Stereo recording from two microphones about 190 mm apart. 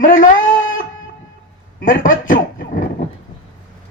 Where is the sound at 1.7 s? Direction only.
45° left (ahead or behind).